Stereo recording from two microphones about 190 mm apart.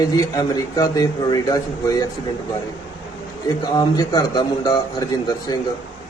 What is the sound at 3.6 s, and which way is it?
A man's voice, 20° left (ahead or behind).